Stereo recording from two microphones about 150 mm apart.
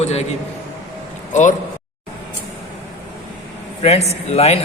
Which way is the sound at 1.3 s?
55° left (ahead or behind).